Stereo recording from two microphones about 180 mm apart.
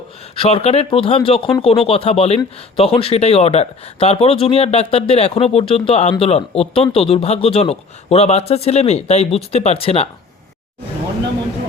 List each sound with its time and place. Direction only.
0.3 s speech: 35° left (ahead or behind)